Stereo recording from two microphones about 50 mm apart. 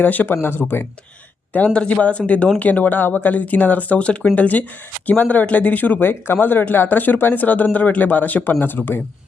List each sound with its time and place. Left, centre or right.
0.0 s speech: left
6.0 s speech: left